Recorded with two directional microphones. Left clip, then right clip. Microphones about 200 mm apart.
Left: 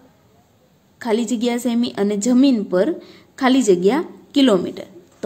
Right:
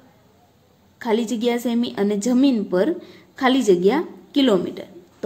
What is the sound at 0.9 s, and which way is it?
A woman's voice, 10° left (ahead or behind).